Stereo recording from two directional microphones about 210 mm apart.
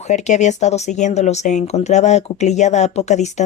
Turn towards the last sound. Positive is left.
turn(degrees=35)  # may be behind; listen again after turning